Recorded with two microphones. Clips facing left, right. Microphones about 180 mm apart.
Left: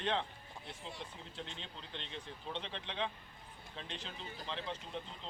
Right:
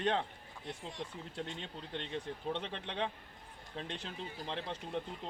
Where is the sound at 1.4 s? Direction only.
50° right (ahead or behind).